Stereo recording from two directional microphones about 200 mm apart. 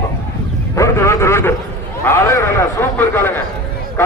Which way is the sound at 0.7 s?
15° left (ahead or behind).